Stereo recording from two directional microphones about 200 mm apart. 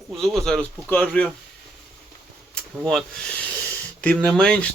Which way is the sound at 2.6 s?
5° left (ahead or behind).